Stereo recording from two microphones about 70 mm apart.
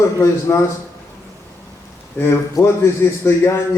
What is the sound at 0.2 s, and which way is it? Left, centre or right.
Speech, left.